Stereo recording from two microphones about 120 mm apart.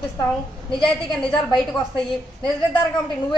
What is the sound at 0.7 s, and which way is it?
Speech, 45° left (ahead or behind).